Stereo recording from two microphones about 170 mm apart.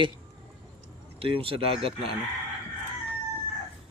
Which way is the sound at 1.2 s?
30° right (ahead or behind).